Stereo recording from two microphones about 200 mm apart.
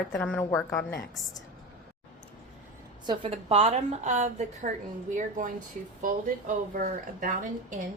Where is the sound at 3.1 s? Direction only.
30° right (ahead or behind).